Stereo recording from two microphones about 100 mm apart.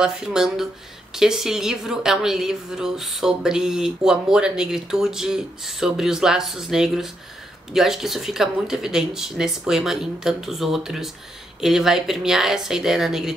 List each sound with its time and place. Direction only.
0.0 s a woman's voice: 5° right (ahead or behind)